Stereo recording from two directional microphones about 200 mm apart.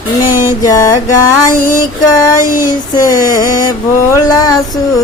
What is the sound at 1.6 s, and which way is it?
Female singing, 40° left (ahead or behind).